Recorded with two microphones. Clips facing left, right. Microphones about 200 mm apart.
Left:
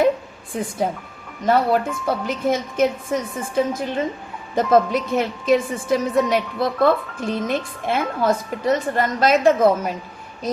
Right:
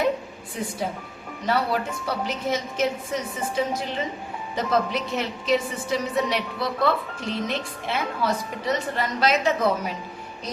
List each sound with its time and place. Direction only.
0.5 s a woman's voice: 50° left (ahead or behind)